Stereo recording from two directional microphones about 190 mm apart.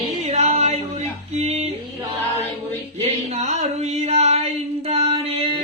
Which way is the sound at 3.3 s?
35° right (ahead or behind).